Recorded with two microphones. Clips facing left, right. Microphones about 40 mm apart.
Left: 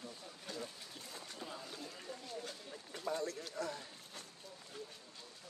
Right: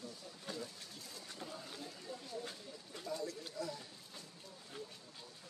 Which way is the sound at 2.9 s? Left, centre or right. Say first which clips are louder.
Left 3 dB; left.